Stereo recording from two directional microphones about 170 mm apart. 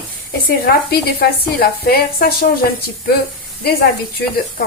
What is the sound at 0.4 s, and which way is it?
Speech, 65° left (ahead or behind).